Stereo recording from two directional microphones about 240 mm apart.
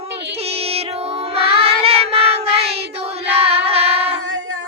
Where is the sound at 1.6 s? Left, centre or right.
Right.